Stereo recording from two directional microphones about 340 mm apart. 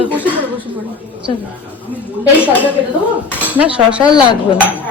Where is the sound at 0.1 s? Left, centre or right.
Centre.